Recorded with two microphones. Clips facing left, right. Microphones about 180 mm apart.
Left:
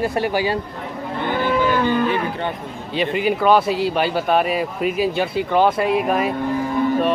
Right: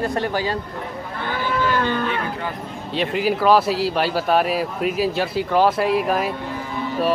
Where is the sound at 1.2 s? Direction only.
20° left (ahead or behind).